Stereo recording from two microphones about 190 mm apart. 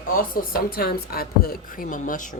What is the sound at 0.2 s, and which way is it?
Speech, 50° left (ahead or behind).